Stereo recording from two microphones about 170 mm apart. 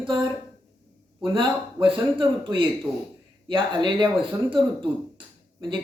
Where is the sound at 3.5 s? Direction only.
25° right (ahead or behind).